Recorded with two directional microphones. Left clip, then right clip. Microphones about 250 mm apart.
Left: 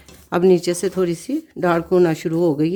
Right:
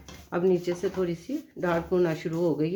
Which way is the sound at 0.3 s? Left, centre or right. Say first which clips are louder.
Left 10 dB; left.